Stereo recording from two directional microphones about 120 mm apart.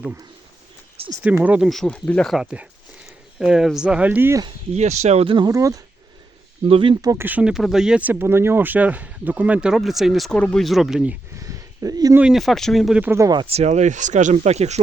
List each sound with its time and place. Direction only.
1.0 s speech: 55° right (ahead or behind)
1.4 s speech: 10° right (ahead or behind)
1.7 s speech: 5° left (ahead or behind)
2.3 s speech: 5° right (ahead or behind)
4.7 s speech: 75° right (ahead or behind)
5.5 s speech: 30° right (ahead or behind)
6.7 s speech: 50° right (ahead or behind)
7.0 s speech: 30° right (ahead or behind)
7.3 s speech: 10° right (ahead or behind)
11.3 s a sound: 25° right (ahead or behind)
12.3 s speech: centre (ahead or behind)
13.0 s speech: 20° right (ahead or behind)
13.5 s speech: 65° right (ahead or behind)